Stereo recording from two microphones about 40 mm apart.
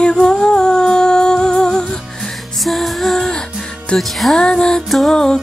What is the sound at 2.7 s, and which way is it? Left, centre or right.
Music, centre.